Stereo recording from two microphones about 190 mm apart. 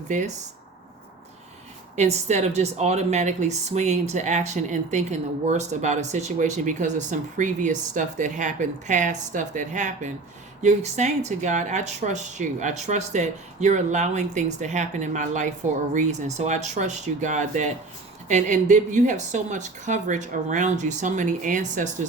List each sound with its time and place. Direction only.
2.0 s speech: 35° right (ahead or behind)